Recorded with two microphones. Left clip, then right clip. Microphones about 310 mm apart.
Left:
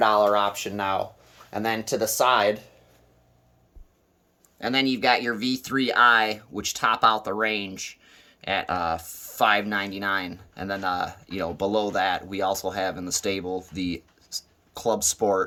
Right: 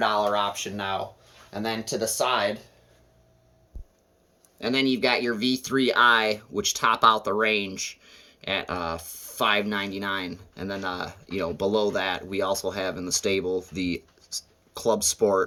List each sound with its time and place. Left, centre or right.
0.0 s speech: left
4.6 s speech: centre